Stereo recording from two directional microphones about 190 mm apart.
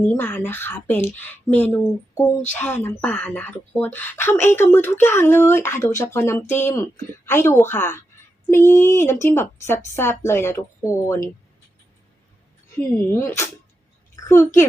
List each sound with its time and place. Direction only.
0.0 s speech: 10° left (ahead or behind)
13.1 s speech: 15° left (ahead or behind)